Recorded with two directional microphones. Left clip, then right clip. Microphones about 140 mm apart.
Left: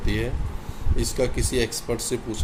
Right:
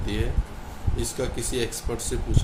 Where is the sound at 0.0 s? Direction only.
35° left (ahead or behind).